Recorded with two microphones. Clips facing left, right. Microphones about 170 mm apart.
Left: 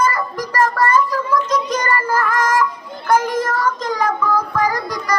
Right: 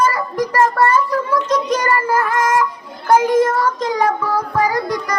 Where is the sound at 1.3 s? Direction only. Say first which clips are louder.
Right 1 dB; 30° right (ahead or behind).